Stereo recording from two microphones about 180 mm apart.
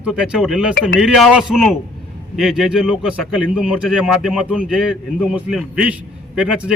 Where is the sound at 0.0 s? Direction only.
5° right (ahead or behind).